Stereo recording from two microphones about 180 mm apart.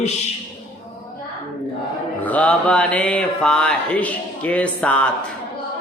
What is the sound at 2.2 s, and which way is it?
Mantra, 5° left (ahead or behind).